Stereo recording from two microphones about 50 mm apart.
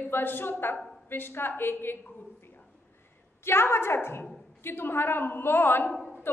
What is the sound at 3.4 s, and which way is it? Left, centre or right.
A woman's voice, left.